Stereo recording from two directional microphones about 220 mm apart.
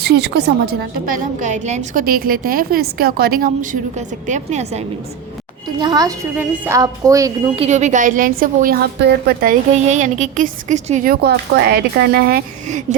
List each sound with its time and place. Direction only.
0.0 s a woman's voice: 50° right (ahead or behind); by 4.9 s 30° right (ahead or behind)
5.8 s a woman's voice: 15° right (ahead or behind)
7.6 s a woman's voice: 30° right (ahead or behind)